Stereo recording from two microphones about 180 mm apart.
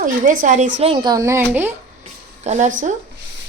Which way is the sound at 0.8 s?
30° right (ahead or behind).